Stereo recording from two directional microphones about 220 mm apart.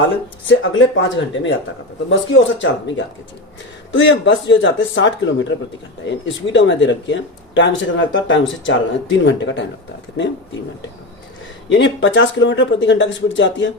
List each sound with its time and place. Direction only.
0.4 s speech: 60° left (ahead or behind)
3.9 s speech: 55° left (ahead or behind)
11.7 s speech: 55° left (ahead or behind)